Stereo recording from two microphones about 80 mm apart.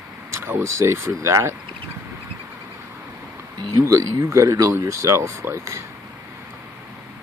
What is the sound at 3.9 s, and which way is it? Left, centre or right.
Speech, right.